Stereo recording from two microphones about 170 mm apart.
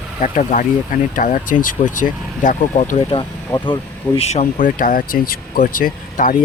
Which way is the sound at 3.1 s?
30° left (ahead or behind).